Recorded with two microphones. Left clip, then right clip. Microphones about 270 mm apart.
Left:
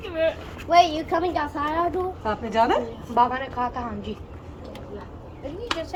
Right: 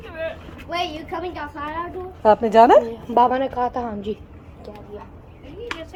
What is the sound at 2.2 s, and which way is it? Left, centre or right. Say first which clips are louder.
Speech: right 11 dB; right.